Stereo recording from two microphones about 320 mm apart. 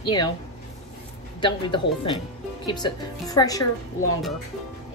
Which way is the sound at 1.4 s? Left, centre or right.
Centre.